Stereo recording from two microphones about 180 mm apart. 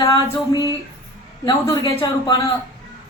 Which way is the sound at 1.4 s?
20° left (ahead or behind).